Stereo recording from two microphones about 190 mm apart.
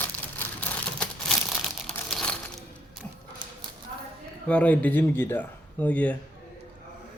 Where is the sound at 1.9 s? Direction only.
5° left (ahead or behind).